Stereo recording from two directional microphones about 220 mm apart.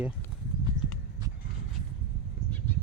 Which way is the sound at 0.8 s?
35° left (ahead or behind).